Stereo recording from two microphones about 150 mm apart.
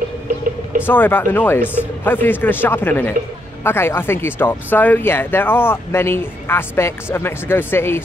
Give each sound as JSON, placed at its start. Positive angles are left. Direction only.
{"t": 0.8, "sound": "speech", "side_deg": 15}